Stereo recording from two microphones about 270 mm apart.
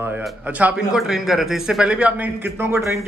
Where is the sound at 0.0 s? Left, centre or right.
Centre.